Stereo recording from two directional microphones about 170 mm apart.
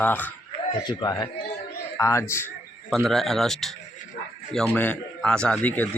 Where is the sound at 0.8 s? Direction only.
25° left (ahead or behind).